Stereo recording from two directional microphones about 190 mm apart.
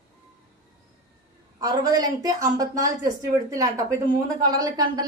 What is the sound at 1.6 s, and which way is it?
A woman's voice, 20° right (ahead or behind).